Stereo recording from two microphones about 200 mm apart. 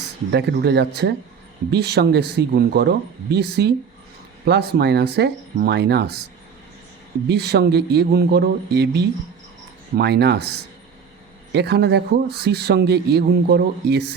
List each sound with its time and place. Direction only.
0.3 s speech: 55° right (ahead or behind)
7.3 s speech: 55° right (ahead or behind)